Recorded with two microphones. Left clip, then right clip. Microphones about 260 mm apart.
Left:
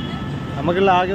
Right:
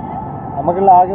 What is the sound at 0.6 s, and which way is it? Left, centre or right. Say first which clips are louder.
Speech: right 7 dB; centre.